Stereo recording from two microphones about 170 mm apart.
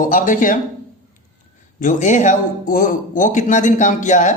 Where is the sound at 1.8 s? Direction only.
50° left (ahead or behind).